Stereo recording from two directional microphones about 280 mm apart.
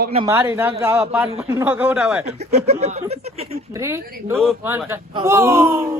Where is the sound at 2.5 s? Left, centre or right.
Right.